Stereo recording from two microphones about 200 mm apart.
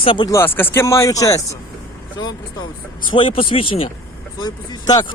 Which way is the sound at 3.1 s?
25° left (ahead or behind).